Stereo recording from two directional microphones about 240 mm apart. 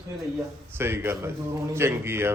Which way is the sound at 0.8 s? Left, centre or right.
Centre.